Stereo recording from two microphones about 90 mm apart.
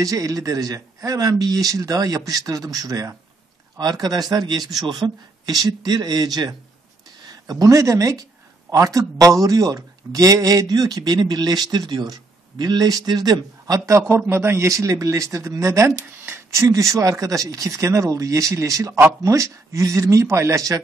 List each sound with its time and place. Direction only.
0.0 s speech: 40° right (ahead or behind)